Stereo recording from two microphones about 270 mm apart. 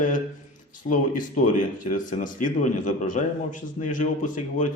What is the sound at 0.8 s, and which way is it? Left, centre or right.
A man's voice, left.